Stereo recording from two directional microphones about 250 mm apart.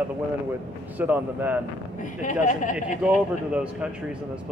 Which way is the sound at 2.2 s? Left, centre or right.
Left.